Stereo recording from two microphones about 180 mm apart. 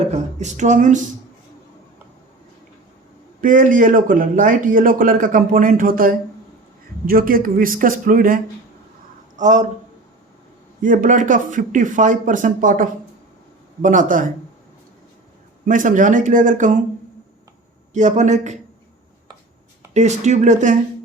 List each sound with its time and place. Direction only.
0.0 s speech: 40° right (ahead or behind)
3.4 s a man's voice: 50° right (ahead or behind)
9.4 s a man's voice: 40° right (ahead or behind)
10.8 s a man's voice: 45° right (ahead or behind)
15.6 s a man's voice: 45° right (ahead or behind)
17.9 s speech: 40° right (ahead or behind)
19.9 s speech: 40° right (ahead or behind)